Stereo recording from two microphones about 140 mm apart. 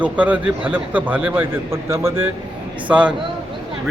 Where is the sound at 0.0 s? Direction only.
10° right (ahead or behind).